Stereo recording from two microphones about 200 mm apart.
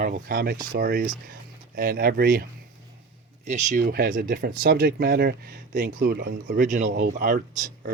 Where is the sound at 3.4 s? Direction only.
40° right (ahead or behind).